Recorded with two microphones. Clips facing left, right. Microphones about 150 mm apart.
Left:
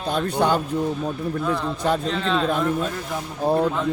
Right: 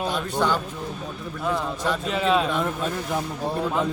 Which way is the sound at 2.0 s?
10° right (ahead or behind).